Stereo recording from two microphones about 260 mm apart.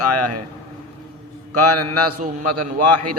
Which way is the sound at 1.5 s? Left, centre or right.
Right.